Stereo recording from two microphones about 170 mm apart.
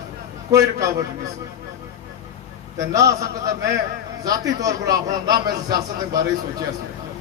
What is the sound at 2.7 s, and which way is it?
A man's voice, 20° right (ahead or behind).